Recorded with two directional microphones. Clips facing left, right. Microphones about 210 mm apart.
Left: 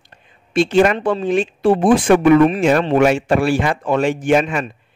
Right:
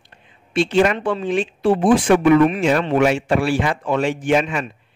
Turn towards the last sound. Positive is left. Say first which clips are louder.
# left 3 dB
turn(degrees=45)  # may be behind; listen again after turning